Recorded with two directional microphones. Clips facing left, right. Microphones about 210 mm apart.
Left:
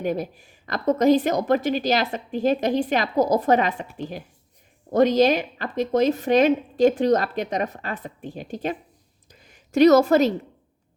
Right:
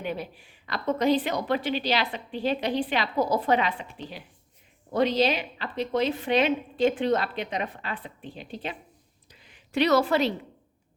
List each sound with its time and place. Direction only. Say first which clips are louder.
0.0 s speech: left 7 dB; 45° left (ahead or behind)
4.9 s speech: left 6 dB; 45° left (ahead or behind)
9.3 s a sound: left 5 dB; 45° left (ahead or behind)